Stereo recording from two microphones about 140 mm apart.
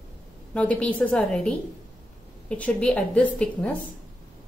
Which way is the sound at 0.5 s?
10° left (ahead or behind).